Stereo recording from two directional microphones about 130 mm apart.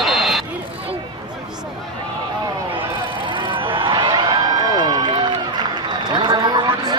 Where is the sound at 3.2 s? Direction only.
40° right (ahead or behind).